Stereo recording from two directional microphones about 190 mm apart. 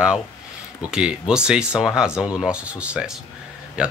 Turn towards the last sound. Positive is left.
turn(degrees=-5)  # may be behind; listen again after turning